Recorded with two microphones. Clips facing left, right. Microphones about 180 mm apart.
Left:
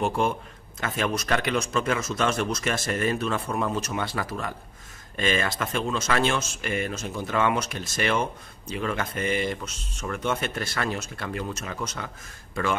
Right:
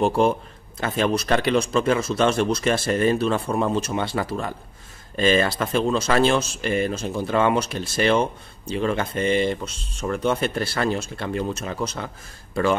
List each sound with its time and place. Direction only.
0.0 s speech: 35° right (ahead or behind)